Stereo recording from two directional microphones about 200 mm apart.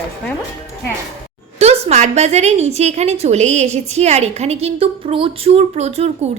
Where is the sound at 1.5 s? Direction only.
30° right (ahead or behind).